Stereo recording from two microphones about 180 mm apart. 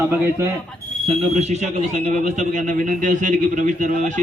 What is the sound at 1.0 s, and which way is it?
A man's voice, 40° right (ahead or behind).